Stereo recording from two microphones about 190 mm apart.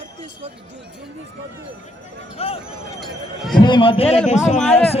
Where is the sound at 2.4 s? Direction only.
30° left (ahead or behind).